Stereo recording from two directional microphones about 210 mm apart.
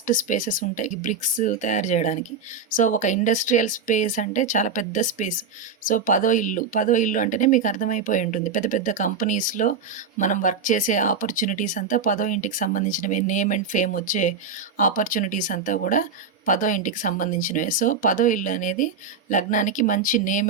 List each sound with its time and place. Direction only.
0.1 s speech: 40° left (ahead or behind)